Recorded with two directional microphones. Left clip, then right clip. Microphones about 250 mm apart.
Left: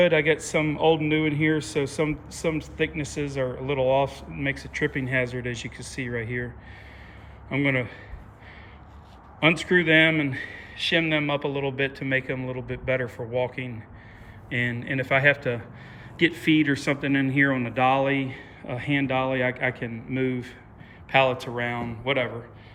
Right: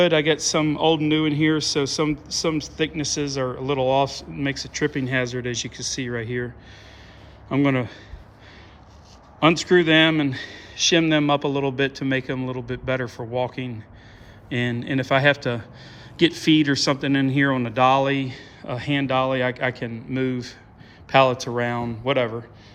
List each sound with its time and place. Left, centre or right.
0.0 s speech: centre
7.5 s speech: centre
9.4 s speech: centre